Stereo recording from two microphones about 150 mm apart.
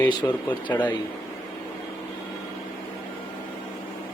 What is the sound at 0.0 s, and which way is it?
Speech, 30° left (ahead or behind).